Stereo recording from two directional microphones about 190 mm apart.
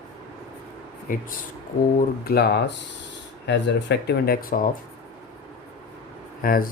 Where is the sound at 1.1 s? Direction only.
45° left (ahead or behind).